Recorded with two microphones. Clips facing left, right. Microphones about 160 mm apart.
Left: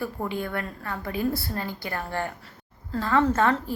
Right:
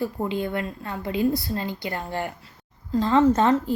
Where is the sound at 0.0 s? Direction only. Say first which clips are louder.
Right 4 dB; 20° right (ahead or behind).